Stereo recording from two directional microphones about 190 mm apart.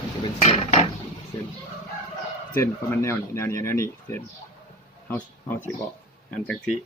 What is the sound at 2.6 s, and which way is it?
Speech, 15° left (ahead or behind).